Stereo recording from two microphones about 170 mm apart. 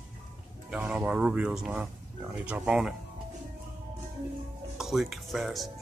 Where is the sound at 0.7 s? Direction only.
5° right (ahead or behind).